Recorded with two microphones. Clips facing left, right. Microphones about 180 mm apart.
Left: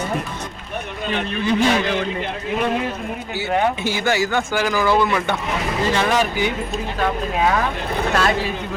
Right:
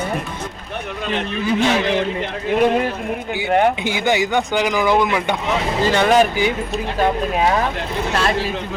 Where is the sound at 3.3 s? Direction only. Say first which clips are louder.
Right 3 dB; 15° right (ahead or behind).